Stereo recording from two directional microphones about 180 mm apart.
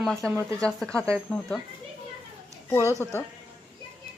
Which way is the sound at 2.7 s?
15° left (ahead or behind).